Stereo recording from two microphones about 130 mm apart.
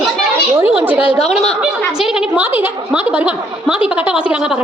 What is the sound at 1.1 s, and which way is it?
Speech, 50° left (ahead or behind).